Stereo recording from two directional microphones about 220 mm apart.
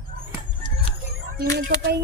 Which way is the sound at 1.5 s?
45° right (ahead or behind).